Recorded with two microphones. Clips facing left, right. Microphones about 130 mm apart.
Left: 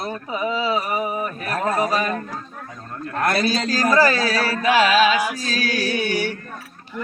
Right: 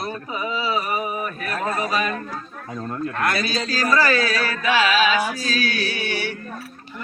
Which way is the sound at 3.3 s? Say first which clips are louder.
Left 4 dB; 55° left (ahead or behind).